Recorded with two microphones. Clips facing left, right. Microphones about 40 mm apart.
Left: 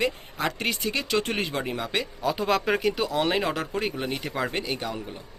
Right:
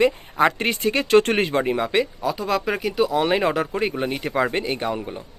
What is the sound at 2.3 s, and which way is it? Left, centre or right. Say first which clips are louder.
Speech: left 1 dB; centre.